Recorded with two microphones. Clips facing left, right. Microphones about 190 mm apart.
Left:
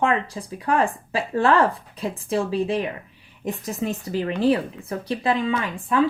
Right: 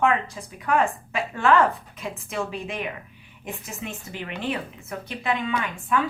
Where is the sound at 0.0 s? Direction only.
30° left (ahead or behind).